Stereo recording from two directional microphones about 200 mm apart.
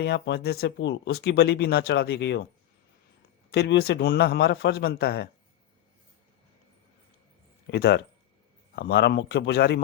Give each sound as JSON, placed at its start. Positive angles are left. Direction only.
{"t": 0.0, "sound": "speech", "side_deg": 60}
{"t": 3.5, "sound": "a man's voice", "side_deg": 55}
{"t": 7.7, "sound": "a man's voice", "side_deg": 55}